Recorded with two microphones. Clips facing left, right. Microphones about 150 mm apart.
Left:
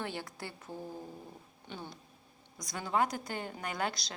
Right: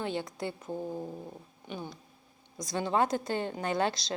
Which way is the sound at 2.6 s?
25° right (ahead or behind).